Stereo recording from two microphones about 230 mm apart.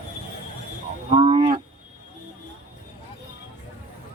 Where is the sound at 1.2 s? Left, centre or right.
Right.